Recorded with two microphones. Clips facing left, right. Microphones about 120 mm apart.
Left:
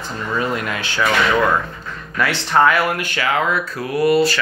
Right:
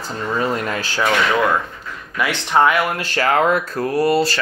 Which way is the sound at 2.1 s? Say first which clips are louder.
Even; 15° right (ahead or behind).